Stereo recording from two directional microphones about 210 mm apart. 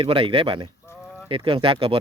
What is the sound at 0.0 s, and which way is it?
Speech, 25° right (ahead or behind).